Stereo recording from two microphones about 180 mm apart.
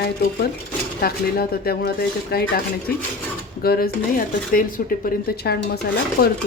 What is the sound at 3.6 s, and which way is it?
Speech, 55° left (ahead or behind).